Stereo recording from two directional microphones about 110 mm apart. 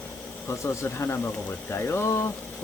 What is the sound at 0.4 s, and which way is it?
Speech, 25° left (ahead or behind).